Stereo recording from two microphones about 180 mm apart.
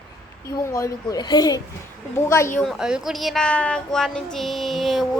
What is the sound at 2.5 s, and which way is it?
Speech, centre (ahead or behind).